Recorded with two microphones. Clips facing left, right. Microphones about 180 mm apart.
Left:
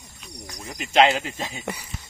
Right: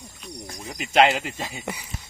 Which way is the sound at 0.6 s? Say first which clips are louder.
Even; centre (ahead or behind).